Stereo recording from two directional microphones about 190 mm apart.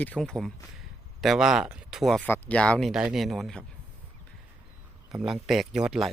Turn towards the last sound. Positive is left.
turn(degrees=-5)  # may be behind; listen again after turning